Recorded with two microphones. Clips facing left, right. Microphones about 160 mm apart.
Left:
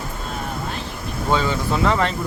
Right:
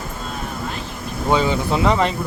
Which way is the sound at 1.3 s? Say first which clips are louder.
Right 3 dB; 15° right (ahead or behind).